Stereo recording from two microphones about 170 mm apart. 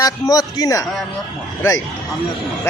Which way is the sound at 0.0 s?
20° left (ahead or behind).